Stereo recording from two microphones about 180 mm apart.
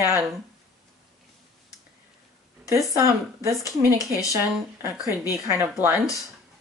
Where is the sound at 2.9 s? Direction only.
15° right (ahead or behind).